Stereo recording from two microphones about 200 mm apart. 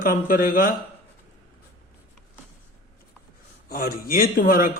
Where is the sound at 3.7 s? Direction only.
50° left (ahead or behind).